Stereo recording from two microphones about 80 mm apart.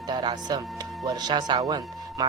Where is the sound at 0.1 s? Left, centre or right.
Right.